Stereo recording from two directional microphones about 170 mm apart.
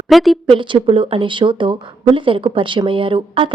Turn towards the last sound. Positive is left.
turn(degrees=-30)  # may be behind; listen again after turning